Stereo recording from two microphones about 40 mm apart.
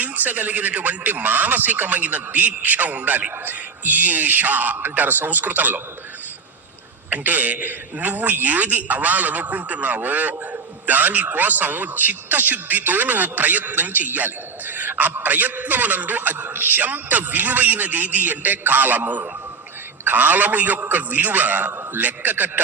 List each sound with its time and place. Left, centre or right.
0.0 s a man's voice: right
7.1 s a man's voice: right